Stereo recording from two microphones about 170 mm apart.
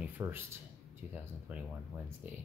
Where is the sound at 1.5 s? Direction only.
10° right (ahead or behind).